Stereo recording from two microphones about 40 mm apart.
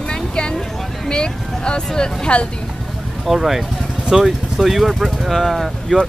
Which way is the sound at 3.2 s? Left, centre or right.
Centre.